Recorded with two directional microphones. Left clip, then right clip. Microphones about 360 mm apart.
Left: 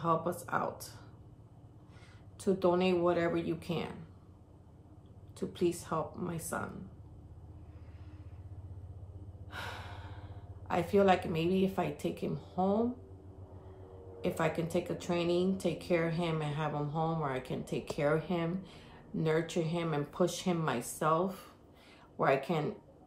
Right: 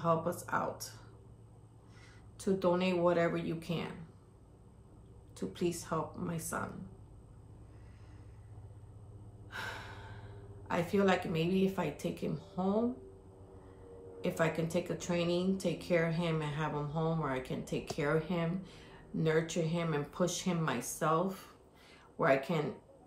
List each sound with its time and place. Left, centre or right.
0.0 s speech: centre
2.3 s speech: centre
5.5 s speech: centre
9.5 s gasp: centre
10.7 s speech: centre
14.2 s speech: centre